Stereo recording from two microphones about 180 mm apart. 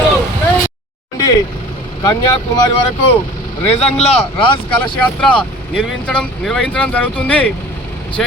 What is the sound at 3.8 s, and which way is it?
Speech, 35° left (ahead or behind).